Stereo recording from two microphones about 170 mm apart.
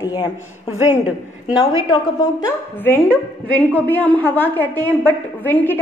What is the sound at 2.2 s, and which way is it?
Speech, 25° left (ahead or behind).